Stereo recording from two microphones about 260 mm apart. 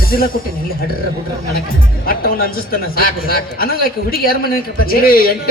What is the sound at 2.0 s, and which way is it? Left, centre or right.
A man's voice, left.